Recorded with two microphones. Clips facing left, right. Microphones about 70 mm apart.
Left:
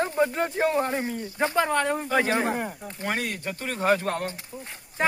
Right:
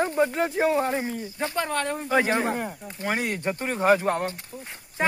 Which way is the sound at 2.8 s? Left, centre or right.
Centre.